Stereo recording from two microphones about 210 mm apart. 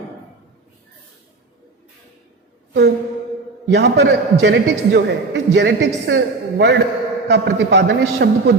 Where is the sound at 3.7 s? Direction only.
55° right (ahead or behind).